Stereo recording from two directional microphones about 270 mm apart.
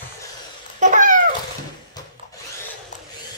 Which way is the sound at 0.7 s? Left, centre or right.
Right.